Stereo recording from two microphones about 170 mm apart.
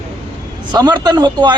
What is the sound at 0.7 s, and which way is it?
Speech, 25° right (ahead or behind).